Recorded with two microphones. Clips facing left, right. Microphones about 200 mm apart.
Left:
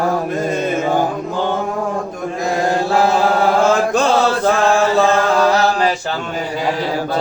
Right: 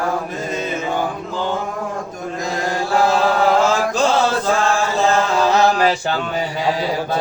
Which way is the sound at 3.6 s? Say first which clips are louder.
Left 3 dB; 55° left (ahead or behind).